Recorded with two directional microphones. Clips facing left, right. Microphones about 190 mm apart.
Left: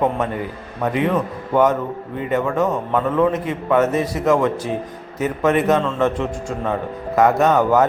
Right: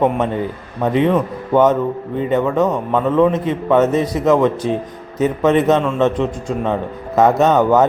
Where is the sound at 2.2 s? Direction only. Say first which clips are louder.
Right 3 dB; 20° right (ahead or behind).